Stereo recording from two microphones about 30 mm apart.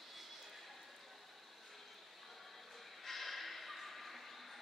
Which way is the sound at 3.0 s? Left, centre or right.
Centre.